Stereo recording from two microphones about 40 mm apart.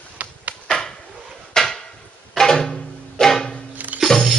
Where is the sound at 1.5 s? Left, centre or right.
Centre.